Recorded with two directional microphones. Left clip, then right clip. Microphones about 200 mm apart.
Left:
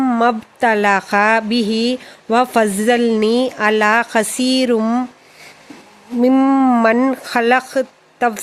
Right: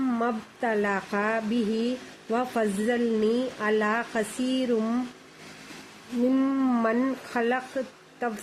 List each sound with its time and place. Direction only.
0.0 s speech: 60° left (ahead or behind)
6.3 s speech: 60° left (ahead or behind)